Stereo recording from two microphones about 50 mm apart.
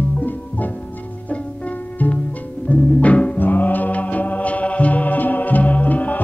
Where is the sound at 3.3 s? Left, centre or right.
Left.